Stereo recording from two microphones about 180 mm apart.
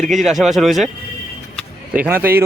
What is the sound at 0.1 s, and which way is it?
Speech, centre (ahead or behind).